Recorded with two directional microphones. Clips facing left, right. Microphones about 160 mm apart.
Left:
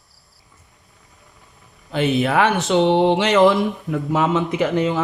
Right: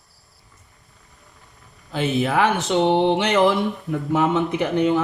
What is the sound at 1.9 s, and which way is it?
Speech, 70° left (ahead or behind).